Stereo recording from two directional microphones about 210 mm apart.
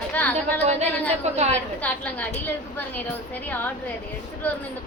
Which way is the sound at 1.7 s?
5° left (ahead or behind).